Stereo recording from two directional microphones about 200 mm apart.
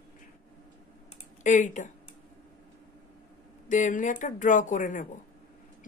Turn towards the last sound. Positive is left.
turn(degrees=40)  # may be behind; listen again after turning